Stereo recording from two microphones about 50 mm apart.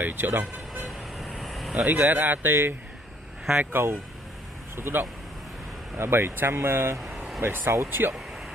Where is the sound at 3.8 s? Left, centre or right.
Right.